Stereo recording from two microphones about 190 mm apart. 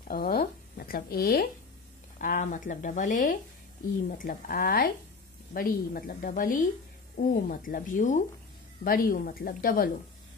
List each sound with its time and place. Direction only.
0.1 s speech: 50° left (ahead or behind)